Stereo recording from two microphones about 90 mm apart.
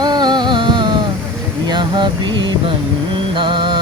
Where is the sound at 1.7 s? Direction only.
55° right (ahead or behind).